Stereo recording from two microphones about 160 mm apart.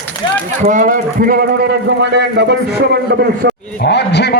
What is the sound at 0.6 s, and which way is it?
Speech, 55° right (ahead or behind).